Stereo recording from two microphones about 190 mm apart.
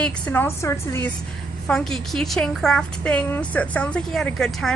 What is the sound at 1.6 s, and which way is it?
A woman's voice, 5° left (ahead or behind).